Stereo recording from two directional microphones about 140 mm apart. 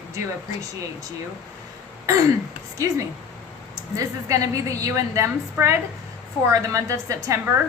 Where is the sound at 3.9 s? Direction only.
25° right (ahead or behind).